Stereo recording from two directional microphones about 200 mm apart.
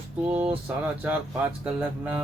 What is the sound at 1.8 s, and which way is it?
Music, 10° right (ahead or behind).